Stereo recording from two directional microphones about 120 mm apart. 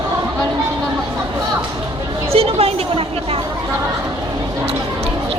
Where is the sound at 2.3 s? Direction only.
55° right (ahead or behind).